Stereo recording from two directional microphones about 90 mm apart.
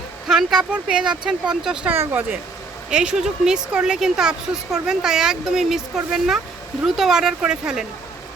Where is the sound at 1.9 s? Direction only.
20° right (ahead or behind).